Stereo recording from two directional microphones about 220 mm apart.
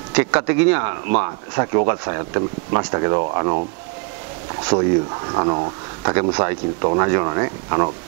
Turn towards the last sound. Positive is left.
turn(degrees=-20)  # may be behind; listen again after turning